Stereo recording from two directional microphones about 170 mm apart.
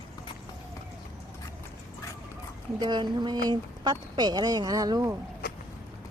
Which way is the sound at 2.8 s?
25° right (ahead or behind).